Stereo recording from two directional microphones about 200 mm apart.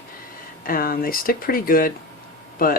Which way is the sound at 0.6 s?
45° left (ahead or behind).